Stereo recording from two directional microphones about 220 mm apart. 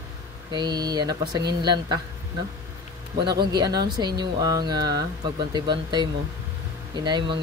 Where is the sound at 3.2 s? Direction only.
20° right (ahead or behind).